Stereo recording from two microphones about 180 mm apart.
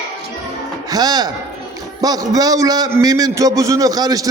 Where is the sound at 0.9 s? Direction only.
20° right (ahead or behind).